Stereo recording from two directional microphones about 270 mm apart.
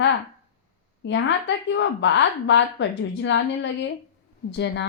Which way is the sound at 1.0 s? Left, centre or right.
Left.